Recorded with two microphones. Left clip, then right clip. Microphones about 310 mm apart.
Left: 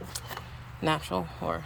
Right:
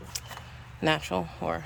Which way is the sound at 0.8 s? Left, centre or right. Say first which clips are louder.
Right 2 dB; centre.